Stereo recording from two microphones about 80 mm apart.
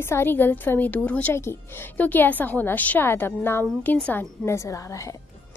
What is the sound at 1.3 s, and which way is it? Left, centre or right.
A woman's voice, left.